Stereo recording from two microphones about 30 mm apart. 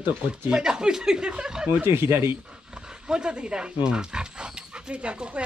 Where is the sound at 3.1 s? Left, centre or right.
Right.